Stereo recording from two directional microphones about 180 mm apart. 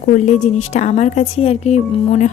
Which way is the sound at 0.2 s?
40° left (ahead or behind).